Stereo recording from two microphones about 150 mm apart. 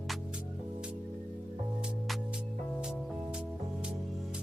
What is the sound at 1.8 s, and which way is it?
Music, 5° right (ahead or behind).